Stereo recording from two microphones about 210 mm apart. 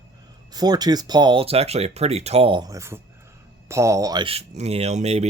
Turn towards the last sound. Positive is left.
turn(degrees=-30)  # may be behind; listen again after turning